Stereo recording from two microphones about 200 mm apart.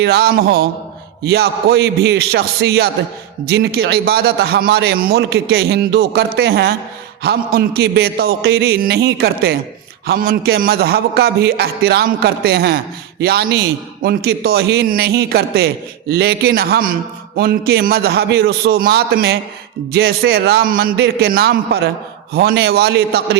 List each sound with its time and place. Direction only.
0.0 s a man's voice: 55° right (ahead or behind)